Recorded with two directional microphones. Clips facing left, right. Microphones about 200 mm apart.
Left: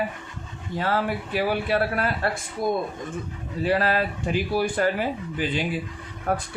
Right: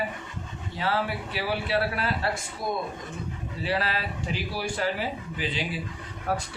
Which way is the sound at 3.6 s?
50° left (ahead or behind).